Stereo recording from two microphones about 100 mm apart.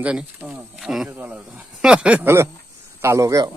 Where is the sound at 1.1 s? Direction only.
15° right (ahead or behind).